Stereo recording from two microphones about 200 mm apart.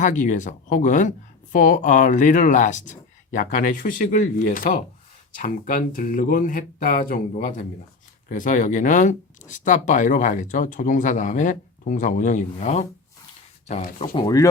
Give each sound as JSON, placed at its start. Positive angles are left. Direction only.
{"t": 0.0, "sound": "speech", "side_deg": 40}